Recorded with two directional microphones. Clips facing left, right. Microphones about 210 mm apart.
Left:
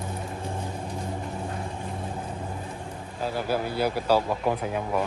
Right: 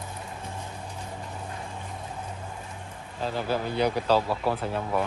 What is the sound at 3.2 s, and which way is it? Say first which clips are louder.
Speech: left 1 dB; 10° left (ahead or behind).